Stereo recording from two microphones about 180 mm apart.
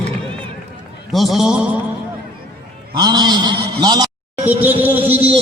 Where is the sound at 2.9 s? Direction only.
25° right (ahead or behind).